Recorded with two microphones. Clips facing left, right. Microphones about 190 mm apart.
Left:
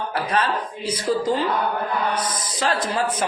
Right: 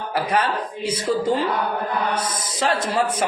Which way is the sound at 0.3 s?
30° right (ahead or behind).